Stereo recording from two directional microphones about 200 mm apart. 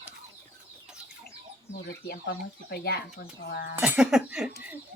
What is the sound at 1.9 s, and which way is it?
Speech, 55° left (ahead or behind).